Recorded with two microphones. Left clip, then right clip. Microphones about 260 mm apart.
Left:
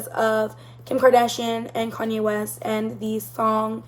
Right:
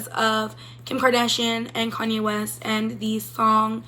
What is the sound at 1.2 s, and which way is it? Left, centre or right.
Speech, right.